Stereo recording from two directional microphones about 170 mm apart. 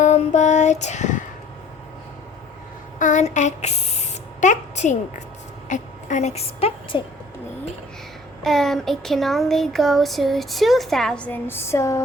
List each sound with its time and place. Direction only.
0.0 s child singing: 45° left (ahead or behind)
3.0 s a woman's voice: 45° left (ahead or behind)
8.4 s speech: centre (ahead or behind)